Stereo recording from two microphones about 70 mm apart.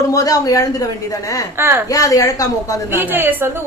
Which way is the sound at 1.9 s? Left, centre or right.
Left.